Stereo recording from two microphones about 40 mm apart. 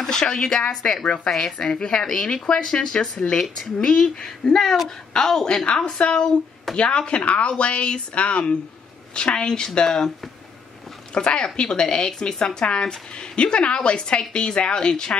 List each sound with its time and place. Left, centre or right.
0.0 s speech: centre
1.3 s speech: centre
4.5 s speech: centre
5.7 s speech: left
9.8 s speech: centre
11.1 s speech: left